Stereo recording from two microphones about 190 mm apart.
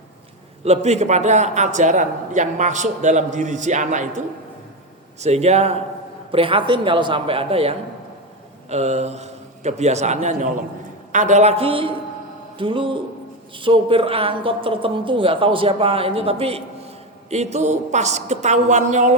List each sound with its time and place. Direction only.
0.6 s a man's voice: 35° right (ahead or behind)
5.2 s a man's voice: 35° right (ahead or behind)